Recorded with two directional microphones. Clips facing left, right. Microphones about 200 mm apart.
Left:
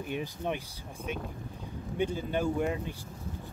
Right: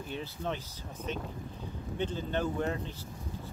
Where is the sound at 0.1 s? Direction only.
15° left (ahead or behind).